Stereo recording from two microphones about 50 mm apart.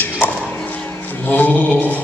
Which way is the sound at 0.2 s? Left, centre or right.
Left.